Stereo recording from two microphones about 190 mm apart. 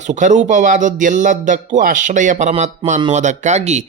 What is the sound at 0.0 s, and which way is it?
Speech, 40° right (ahead or behind).